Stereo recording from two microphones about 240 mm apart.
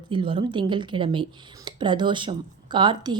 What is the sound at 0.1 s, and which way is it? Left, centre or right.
Speech, right.